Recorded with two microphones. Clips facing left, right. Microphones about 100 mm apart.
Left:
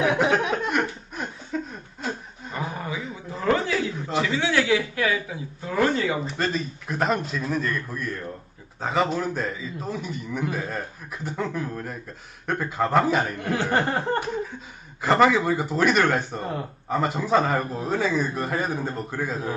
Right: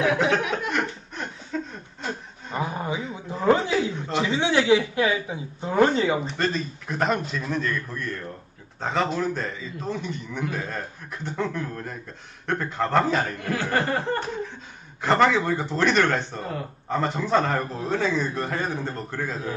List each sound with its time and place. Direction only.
0.0 s a sound: 25° left (ahead or behind)
0.7 s chuckle: 10° left (ahead or behind)
2.5 s a sound: 25° right (ahead or behind)
4.2 s a man's voice: 20° right (ahead or behind)
6.2 s a man's voice: centre (ahead or behind)
13.4 s speech: 20° left (ahead or behind)
15.0 s a man's voice: 5° left (ahead or behind)